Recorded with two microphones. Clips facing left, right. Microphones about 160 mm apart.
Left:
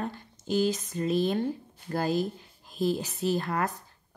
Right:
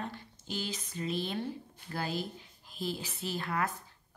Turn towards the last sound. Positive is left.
turn(degrees=40)  # may be behind; listen again after turning